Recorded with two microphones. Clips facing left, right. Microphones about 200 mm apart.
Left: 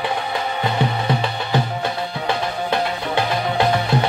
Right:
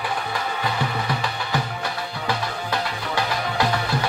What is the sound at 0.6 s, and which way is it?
Music, 25° left (ahead or behind).